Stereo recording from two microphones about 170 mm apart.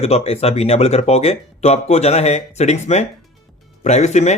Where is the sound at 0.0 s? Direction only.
35° left (ahead or behind).